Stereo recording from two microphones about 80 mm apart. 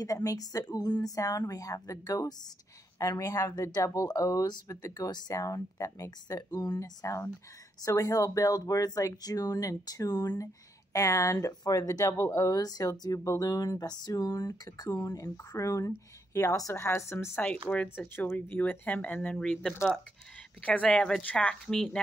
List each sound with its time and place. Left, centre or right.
0.0 s speech: left
13.2 s speech: left
13.5 s speech: left
16.7 s speech: left
17.4 s speech: centre
19.3 s speech: centre
21.6 s speech: centre